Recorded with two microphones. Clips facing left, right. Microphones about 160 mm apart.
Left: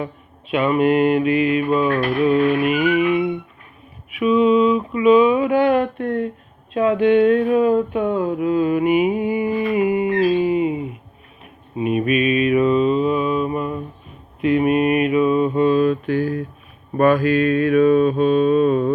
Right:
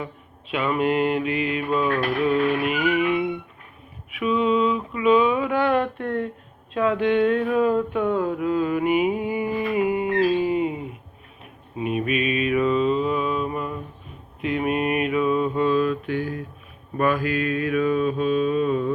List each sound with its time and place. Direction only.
0.0 s mantra: 15° left (ahead or behind)
4.2 s a sound: 10° left (ahead or behind)
11.8 s mantra: 15° left (ahead or behind)
16.0 s a sound: 45° left (ahead or behind)
17.0 s mantra: 40° left (ahead or behind)
17.9 s mantra: 60° left (ahead or behind)